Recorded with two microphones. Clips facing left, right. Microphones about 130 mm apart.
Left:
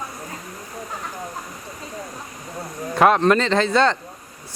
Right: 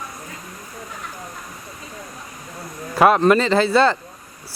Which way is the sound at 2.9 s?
5° right (ahead or behind).